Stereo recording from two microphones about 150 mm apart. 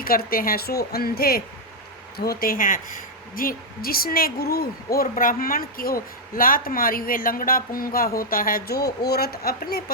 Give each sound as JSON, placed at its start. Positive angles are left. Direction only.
{"t": 0.0, "sound": "a woman's voice", "side_deg": 75}